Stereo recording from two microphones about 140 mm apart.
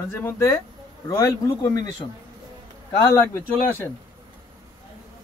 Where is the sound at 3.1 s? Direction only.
20° left (ahead or behind).